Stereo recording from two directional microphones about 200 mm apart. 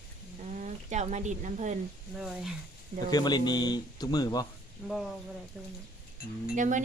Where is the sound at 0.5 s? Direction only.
40° right (ahead or behind).